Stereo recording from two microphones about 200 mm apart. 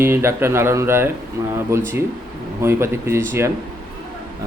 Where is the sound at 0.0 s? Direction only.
10° right (ahead or behind).